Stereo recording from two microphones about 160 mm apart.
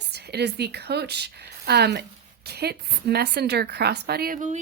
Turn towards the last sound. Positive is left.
turn(degrees=-75)  # may be behind; listen again after turning